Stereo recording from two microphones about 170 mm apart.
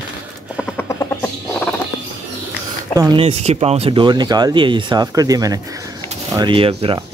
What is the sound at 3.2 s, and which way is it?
Speech, 40° right (ahead or behind).